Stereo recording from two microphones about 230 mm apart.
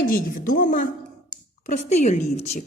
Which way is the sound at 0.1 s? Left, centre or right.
Left.